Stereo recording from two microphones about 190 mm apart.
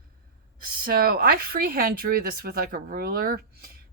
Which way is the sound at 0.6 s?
50° right (ahead or behind).